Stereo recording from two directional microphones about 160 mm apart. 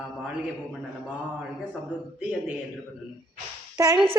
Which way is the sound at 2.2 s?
5° right (ahead or behind).